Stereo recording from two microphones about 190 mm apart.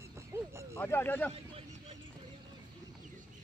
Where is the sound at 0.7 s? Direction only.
10° left (ahead or behind).